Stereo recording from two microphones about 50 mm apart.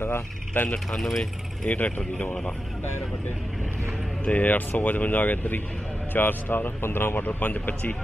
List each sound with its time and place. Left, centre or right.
0.0 s speech: left
0.9 s speech: centre
1.7 s speech: left
4.2 s speech: left
7.2 s speech: left